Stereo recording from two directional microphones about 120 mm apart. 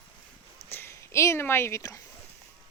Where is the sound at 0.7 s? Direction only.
20° left (ahead or behind).